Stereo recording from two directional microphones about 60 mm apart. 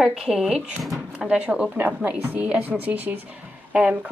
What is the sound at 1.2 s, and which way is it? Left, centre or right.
A woman's voice, centre.